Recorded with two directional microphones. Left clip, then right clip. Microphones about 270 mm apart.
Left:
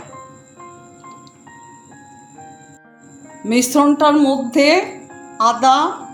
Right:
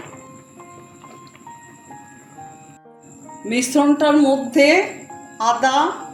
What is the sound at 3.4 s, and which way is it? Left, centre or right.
A woman's voice, left.